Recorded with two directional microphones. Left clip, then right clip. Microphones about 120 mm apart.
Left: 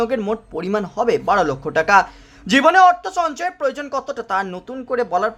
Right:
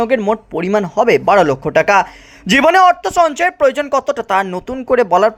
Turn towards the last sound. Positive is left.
turn(degrees=-45)  # may be behind; listen again after turning